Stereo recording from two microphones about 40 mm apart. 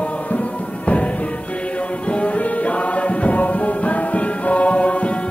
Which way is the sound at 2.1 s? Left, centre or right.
Left.